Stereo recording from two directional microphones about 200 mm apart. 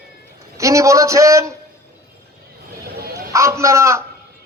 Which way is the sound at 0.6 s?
15° right (ahead or behind).